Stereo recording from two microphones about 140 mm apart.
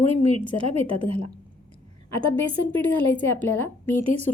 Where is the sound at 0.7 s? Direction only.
45° right (ahead or behind).